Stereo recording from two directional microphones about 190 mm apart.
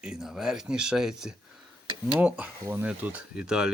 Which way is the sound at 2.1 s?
5° right (ahead or behind).